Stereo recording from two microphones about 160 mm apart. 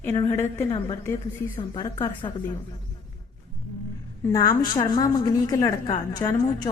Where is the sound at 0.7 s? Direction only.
30° left (ahead or behind).